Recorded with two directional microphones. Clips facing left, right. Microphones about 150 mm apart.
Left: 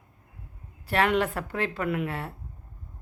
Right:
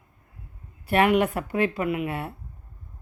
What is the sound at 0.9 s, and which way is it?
Speech, 15° right (ahead or behind).